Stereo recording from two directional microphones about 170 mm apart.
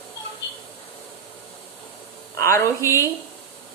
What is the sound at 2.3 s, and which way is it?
Speech, 15° left (ahead or behind).